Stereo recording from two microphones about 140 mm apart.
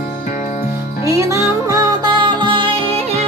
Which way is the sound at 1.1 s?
20° right (ahead or behind).